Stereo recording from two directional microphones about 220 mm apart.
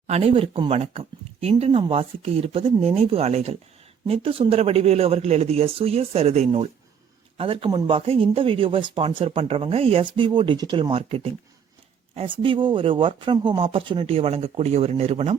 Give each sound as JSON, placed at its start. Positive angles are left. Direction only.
{"t": 0.1, "sound": "speech", "side_deg": -25}